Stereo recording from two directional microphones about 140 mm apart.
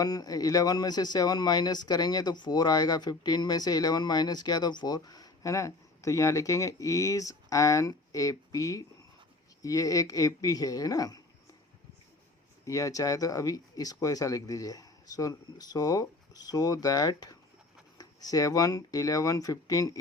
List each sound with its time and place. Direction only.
0.0 s speech: 25° left (ahead or behind)
12.6 s speech: 25° left (ahead or behind)